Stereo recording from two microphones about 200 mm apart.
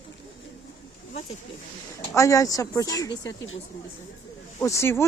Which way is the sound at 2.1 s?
15° left (ahead or behind).